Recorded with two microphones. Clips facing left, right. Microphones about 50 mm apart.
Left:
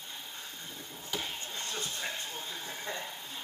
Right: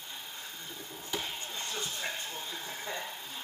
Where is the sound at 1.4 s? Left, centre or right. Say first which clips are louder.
Even; centre.